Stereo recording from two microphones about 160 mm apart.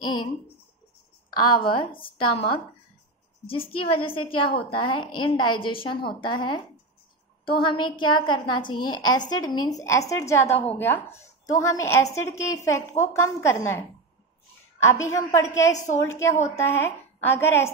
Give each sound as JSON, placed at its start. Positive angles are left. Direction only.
{"t": 0.0, "sound": "speech", "side_deg": 25}
{"t": 1.4, "sound": "a woman's voice", "side_deg": 30}
{"t": 15.7, "sound": "a woman's voice", "side_deg": 50}
{"t": 16.1, "sound": "a woman's voice", "side_deg": 15}